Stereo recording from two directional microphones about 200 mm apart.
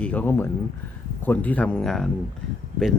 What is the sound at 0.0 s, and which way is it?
Speech, 10° left (ahead or behind).